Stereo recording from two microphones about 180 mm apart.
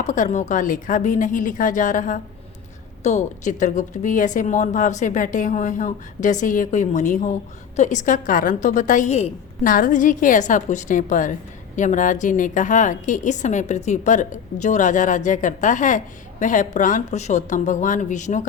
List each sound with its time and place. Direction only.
0.0 s speech: 45° left (ahead or behind)
9.6 s speech: 50° left (ahead or behind)